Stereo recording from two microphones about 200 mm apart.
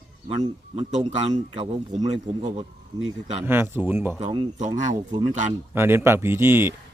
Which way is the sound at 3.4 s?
10° right (ahead or behind).